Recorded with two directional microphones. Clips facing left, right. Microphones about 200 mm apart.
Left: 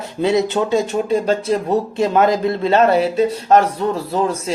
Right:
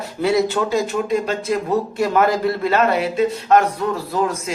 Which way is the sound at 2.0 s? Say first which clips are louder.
Left 2 dB; 20° left (ahead or behind).